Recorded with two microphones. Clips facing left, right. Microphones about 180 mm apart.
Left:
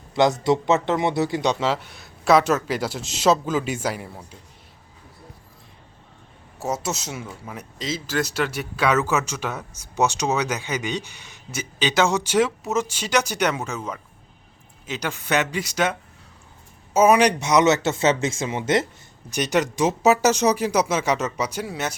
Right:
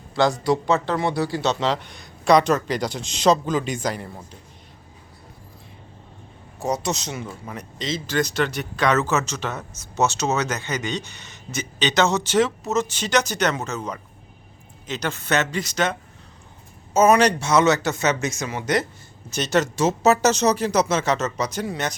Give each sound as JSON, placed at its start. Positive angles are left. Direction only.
{"t": 0.1, "sound": "speech", "side_deg": 20}
{"t": 6.6, "sound": "speech", "side_deg": 5}
{"t": 19.3, "sound": "speech", "side_deg": 15}